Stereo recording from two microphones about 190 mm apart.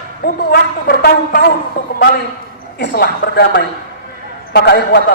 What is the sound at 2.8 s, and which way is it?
A man's voice, 55° left (ahead or behind).